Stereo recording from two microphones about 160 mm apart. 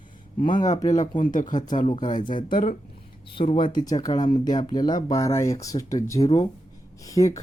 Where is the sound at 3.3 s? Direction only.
35° left (ahead or behind).